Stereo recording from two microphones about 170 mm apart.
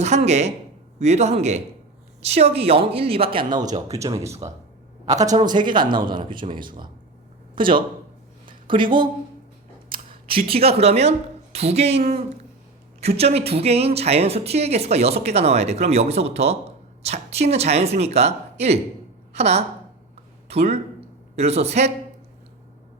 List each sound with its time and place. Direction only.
0.0 s speech: 40° right (ahead or behind)
8.4 s a sound: 30° right (ahead or behind)
9.9 s a woman's voice: 35° right (ahead or behind)